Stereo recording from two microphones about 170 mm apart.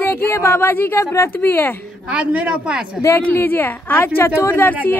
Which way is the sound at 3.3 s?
10° left (ahead or behind).